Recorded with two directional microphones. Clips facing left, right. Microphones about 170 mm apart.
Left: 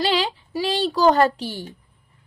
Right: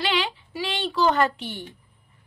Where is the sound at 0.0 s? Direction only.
35° left (ahead or behind).